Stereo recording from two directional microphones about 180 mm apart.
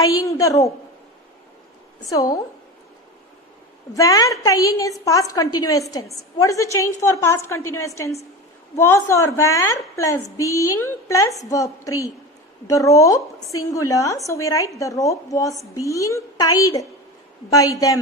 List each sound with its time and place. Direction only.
0.0 s a woman's voice: 20° left (ahead or behind)
2.0 s a woman's voice: 20° left (ahead or behind)
3.9 s a woman's voice: 20° left (ahead or behind)